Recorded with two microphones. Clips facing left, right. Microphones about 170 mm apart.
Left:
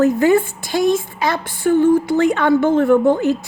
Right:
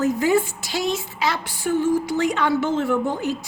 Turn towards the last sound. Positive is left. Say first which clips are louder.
# left 9 dB
turn(degrees=60)  # may be behind; listen again after turning